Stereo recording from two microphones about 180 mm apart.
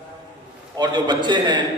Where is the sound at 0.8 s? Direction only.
25° right (ahead or behind).